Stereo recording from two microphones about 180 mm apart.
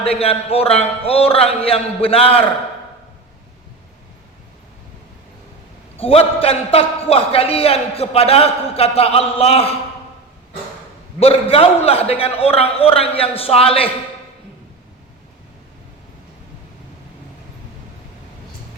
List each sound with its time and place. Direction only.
0.0 s a man's voice: 35° left (ahead or behind)
6.0 s a man's voice: 30° left (ahead or behind)
11.2 s a man's voice: 30° left (ahead or behind)